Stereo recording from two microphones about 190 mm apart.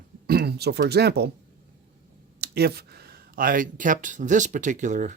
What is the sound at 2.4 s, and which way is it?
Speech, 55° right (ahead or behind).